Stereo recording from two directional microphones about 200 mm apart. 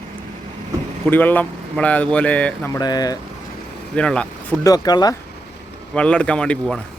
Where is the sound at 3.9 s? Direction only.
5° left (ahead or behind).